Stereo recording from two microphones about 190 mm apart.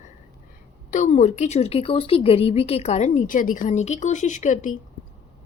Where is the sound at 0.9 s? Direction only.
40° left (ahead or behind).